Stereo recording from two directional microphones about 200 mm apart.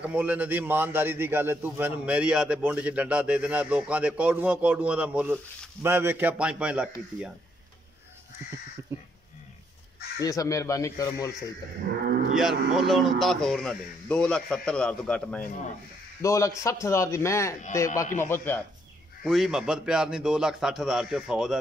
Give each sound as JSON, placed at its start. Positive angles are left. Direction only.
{"t": 0.0, "sound": "a man's voice", "side_deg": -5}
{"t": 8.9, "sound": "crow", "side_deg": -10}
{"t": 10.2, "sound": "speech", "side_deg": 15}
{"t": 12.4, "sound": "speech", "side_deg": 0}
{"t": 19.2, "sound": "speech", "side_deg": -5}